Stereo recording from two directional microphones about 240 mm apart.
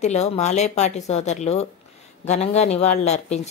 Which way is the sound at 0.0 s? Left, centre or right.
Left.